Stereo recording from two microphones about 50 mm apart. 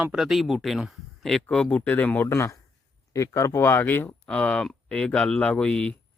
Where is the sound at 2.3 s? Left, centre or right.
Left.